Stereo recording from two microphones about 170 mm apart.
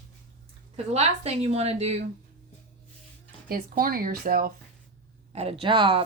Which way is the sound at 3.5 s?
55° right (ahead or behind).